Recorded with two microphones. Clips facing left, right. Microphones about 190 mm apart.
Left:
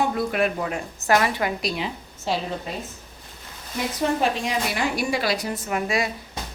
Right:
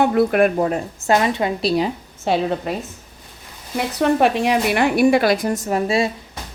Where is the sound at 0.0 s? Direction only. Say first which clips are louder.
Right 7 dB; 65° right (ahead or behind); by 0.8 s 45° right (ahead or behind).